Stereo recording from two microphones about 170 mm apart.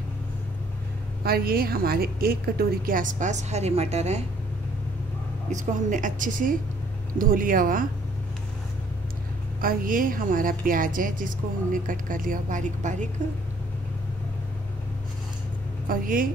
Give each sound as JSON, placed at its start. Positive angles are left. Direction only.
{"t": 1.2, "sound": "a woman's voice", "side_deg": -65}
{"t": 5.5, "sound": "a woman's voice", "side_deg": -50}
{"t": 9.6, "sound": "a woman's voice", "side_deg": -55}
{"t": 15.9, "sound": "speech", "side_deg": -55}